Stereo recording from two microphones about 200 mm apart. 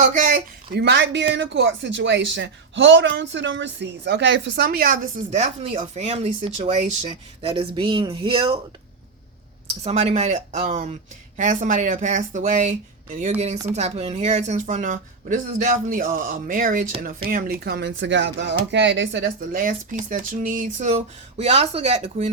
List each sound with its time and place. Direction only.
0.0 s speech: 40° right (ahead or behind); by 8.5 s 25° right (ahead or behind)
9.8 s speech: 30° right (ahead or behind)
13.7 s speech: 30° right (ahead or behind)